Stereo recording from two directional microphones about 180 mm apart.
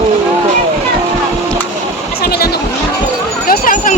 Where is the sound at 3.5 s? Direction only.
50° left (ahead or behind).